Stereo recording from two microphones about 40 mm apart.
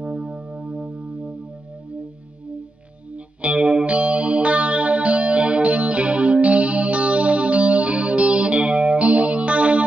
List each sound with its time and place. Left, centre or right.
0.0 s music: right
3.4 s music: right